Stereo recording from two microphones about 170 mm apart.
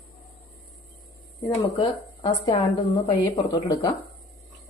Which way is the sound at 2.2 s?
30° left (ahead or behind).